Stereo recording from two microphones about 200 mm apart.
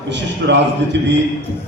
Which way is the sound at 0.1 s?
60° right (ahead or behind).